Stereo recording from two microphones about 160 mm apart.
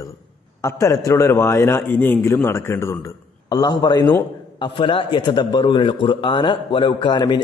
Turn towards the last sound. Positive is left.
turn(degrees=30)  # may be behind; listen again after turning